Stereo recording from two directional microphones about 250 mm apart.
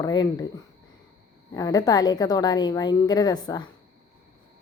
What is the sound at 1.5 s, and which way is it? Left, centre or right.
A woman's voice, centre.